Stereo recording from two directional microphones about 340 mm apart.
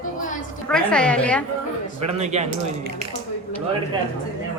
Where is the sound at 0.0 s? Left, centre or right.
Left.